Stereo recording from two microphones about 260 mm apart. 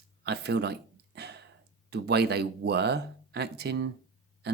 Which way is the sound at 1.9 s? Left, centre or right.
Right.